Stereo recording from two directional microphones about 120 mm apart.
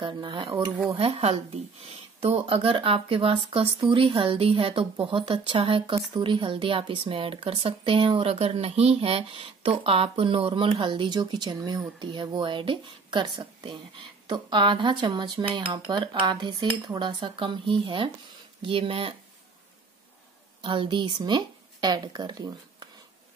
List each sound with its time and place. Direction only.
0.0 s speech: 40° right (ahead or behind)
0.9 s speech: 55° right (ahead or behind)
20.6 s speech: 45° right (ahead or behind)